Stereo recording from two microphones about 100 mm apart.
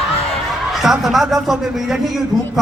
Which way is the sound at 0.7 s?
5° right (ahead or behind).